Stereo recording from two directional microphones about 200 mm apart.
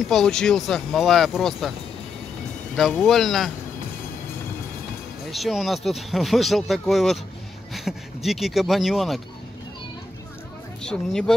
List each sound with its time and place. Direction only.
0.0 s speech: centre (ahead or behind)
2.7 s speech: centre (ahead or behind)
5.3 s speech: centre (ahead or behind)
10.8 s speech: 5° left (ahead or behind)